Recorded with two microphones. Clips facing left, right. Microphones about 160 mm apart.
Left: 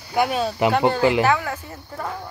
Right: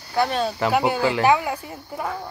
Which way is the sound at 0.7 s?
10° right (ahead or behind).